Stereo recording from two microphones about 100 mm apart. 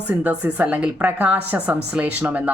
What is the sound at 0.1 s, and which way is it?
Speech, 15° right (ahead or behind).